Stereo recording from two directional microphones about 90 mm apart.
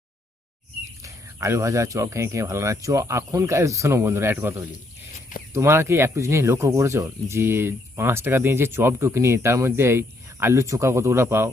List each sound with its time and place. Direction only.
1.0 s speech: 35° right (ahead or behind)